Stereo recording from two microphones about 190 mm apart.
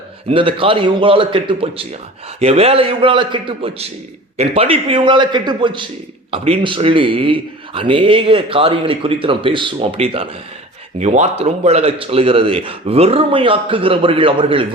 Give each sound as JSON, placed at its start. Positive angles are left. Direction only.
{"t": 0.3, "sound": "a man's voice", "side_deg": -25}